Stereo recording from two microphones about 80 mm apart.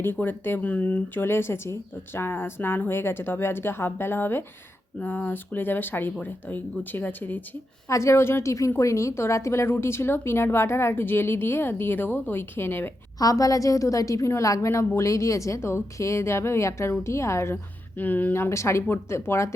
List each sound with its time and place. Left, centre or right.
0.0 s speech: left
7.9 s a woman's voice: left
13.1 s a woman's voice: left